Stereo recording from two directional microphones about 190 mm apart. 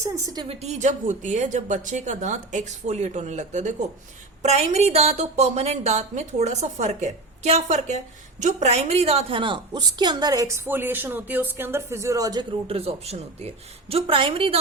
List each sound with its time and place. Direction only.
0.4 s a woman's voice: 35° right (ahead or behind)